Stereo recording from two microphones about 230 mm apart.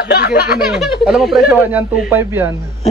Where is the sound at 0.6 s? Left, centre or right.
Centre.